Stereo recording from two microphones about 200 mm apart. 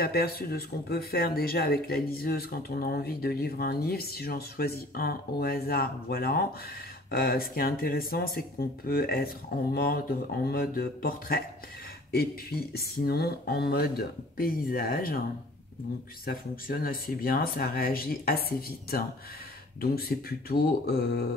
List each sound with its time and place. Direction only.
0.0 s speech: 50° left (ahead or behind)
16.3 s speech: 45° left (ahead or behind)